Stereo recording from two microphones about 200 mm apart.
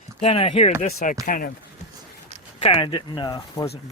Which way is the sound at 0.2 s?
30° left (ahead or behind).